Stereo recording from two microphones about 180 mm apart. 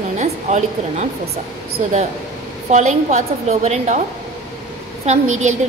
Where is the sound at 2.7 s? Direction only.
40° right (ahead or behind).